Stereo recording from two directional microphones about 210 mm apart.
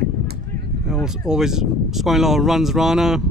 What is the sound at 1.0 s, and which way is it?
Speech, 5° right (ahead or behind).